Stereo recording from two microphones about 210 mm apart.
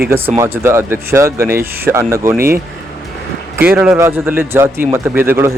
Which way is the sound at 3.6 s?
10° right (ahead or behind).